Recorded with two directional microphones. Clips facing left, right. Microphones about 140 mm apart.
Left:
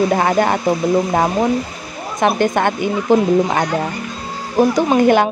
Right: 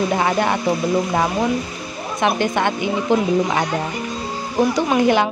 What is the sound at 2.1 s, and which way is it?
A woman's voice, 45° left (ahead or behind).